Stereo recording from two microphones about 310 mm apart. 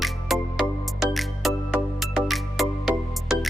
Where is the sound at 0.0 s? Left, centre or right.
Centre.